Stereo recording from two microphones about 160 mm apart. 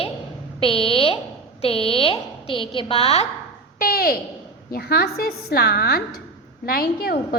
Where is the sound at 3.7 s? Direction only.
70° left (ahead or behind); by 6.0 s 85° left.